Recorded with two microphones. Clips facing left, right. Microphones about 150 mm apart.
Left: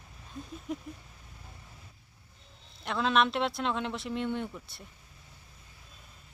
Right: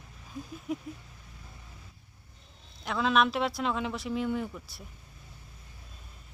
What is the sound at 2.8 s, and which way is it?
Speech, centre (ahead or behind).